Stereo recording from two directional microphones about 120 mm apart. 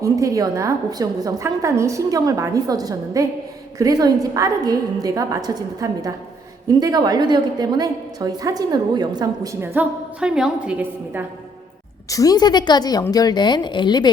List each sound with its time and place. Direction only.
0.0 s a woman's voice: 25° right (ahead or behind)
9.7 s a woman's voice: 10° right (ahead or behind)
12.0 s a woman's voice: 30° left (ahead or behind)